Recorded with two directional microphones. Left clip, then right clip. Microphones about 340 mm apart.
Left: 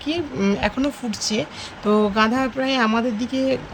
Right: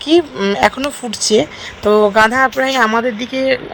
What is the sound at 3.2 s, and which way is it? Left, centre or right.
Speech, right.